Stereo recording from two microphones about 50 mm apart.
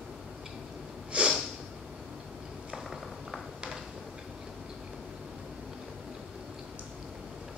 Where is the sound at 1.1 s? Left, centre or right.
Right.